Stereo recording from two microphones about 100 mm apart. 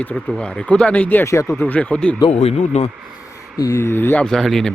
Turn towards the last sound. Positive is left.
turn(degrees=5)  # may be behind; listen again after turning